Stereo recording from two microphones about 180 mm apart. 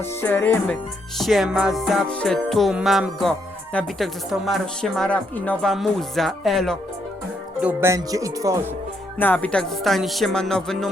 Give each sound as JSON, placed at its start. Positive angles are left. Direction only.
{"t": 0.2, "sound": "music", "side_deg": 10}
{"t": 1.2, "sound": "music", "side_deg": 0}
{"t": 7.6, "sound": "speech", "side_deg": -10}
{"t": 9.1, "sound": "music", "side_deg": 10}